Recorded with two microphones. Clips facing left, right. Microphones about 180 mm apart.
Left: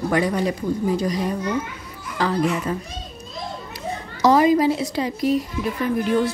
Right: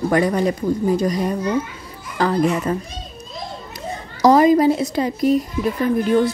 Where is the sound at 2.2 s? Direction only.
45° right (ahead or behind).